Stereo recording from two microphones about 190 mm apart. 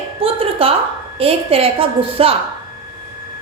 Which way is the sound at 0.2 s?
30° right (ahead or behind).